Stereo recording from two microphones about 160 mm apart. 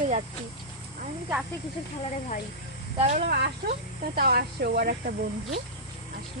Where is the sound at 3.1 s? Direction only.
75° right (ahead or behind).